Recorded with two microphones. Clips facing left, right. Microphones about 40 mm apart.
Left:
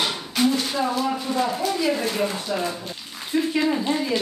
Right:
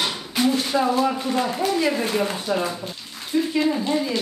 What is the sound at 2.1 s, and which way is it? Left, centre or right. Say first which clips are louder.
Speech: right 2 dB; centre.